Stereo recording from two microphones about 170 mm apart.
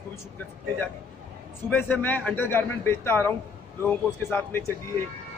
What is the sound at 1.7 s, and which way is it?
A man's voice, 10° left (ahead or behind).